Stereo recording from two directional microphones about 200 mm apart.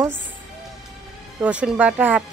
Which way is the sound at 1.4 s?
5° right (ahead or behind).